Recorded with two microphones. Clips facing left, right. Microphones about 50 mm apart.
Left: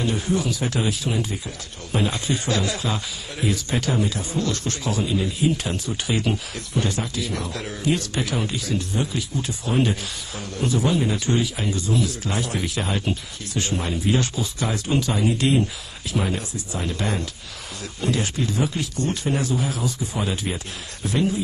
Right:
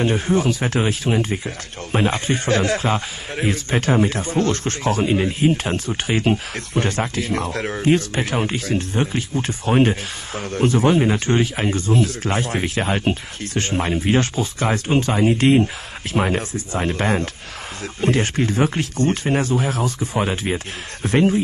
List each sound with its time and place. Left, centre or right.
0.0 s speech: right